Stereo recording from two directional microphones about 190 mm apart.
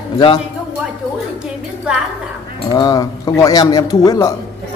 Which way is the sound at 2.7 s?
20° left (ahead or behind).